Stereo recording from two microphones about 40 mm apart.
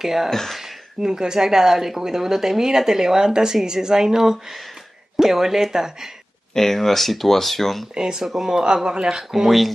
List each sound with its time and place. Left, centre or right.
0.0 s speech: centre
0.3 s speech: centre
0.6 s speech: centre
6.5 s speech: centre
7.9 s speech: centre